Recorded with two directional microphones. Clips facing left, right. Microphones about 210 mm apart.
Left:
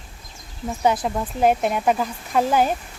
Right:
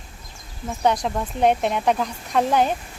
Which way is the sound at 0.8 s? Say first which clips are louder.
Even; 5° left (ahead or behind).